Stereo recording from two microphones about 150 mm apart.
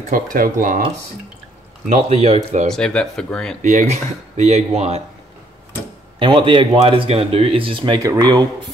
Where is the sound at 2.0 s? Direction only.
40° right (ahead or behind).